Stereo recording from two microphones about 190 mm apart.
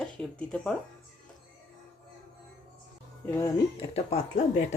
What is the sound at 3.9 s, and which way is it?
Speech, 35° left (ahead or behind).